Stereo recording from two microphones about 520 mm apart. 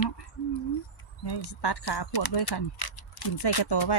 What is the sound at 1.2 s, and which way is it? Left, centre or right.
Speech, left.